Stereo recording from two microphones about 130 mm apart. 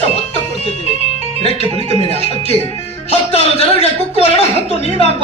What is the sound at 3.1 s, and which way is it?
Speech, 50° left (ahead or behind).